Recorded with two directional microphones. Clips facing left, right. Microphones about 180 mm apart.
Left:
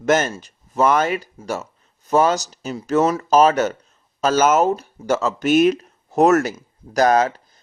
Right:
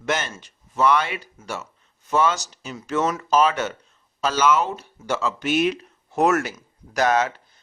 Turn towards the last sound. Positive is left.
turn(degrees=40)  # may be behind; listen again after turning